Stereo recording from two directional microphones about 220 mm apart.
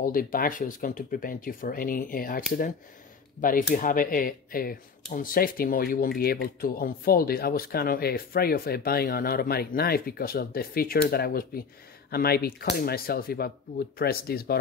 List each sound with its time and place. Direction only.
0.0 s speech: 40° left (ahead or behind)